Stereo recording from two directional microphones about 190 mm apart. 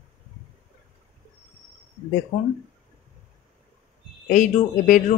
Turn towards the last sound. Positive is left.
turn(degrees=45)  # may be behind; listen again after turning